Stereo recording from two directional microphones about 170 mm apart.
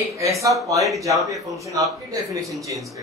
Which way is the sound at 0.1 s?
20° right (ahead or behind).